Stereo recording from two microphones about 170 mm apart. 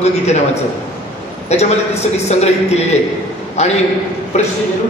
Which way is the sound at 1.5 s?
40° left (ahead or behind).